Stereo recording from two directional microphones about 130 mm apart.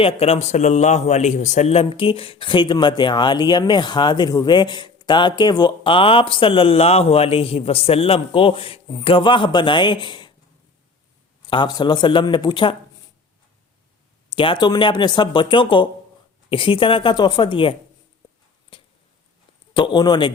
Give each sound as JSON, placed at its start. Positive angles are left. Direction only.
{"t": 0.0, "sound": "a man's voice", "side_deg": 55}
{"t": 11.4, "sound": "speech", "side_deg": 35}
{"t": 14.3, "sound": "speech", "side_deg": 40}
{"t": 18.7, "sound": "a sound", "side_deg": 40}
{"t": 19.7, "sound": "speech", "side_deg": 35}